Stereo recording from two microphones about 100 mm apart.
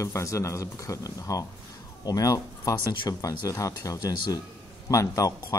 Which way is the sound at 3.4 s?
35° left (ahead or behind).